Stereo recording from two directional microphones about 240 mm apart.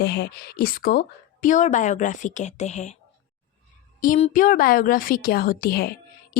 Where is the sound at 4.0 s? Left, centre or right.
Left.